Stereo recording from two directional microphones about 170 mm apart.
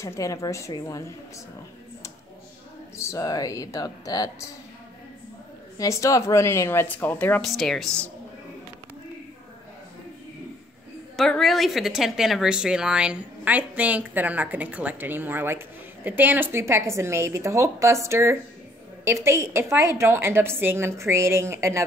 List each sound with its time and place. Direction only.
0.0 s speech: 20° left (ahead or behind)
3.0 s speech: 20° left (ahead or behind)
5.8 s speech: 20° left (ahead or behind)
11.1 s speech: centre (ahead or behind); by 21.8 s 15° right (ahead or behind)